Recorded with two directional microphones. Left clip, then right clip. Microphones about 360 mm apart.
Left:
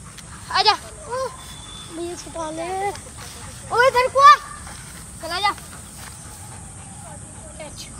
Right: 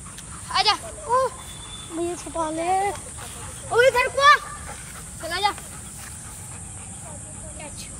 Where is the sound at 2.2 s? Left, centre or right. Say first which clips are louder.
Right 2 dB; right.